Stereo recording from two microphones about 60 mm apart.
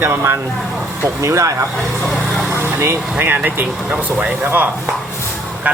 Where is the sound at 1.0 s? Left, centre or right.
Right.